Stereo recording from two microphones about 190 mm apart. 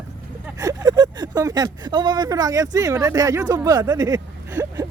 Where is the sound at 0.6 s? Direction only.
20° right (ahead or behind).